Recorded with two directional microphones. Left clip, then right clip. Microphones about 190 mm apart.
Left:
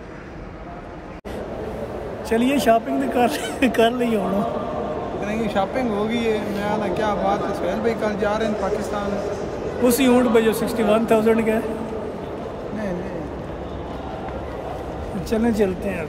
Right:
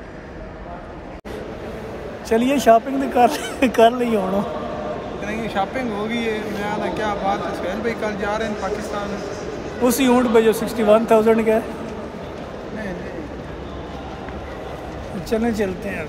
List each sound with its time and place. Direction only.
2.2 s speech: 5° left (ahead or behind)
5.2 s speech: 25° left (ahead or behind)
9.8 s speech: 5° left (ahead or behind)
15.2 s speech: 15° left (ahead or behind)